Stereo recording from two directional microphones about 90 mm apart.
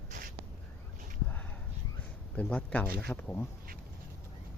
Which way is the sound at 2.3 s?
15° left (ahead or behind).